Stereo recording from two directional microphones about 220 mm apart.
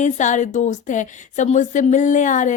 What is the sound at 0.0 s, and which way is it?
A woman's voice, 35° left (ahead or behind).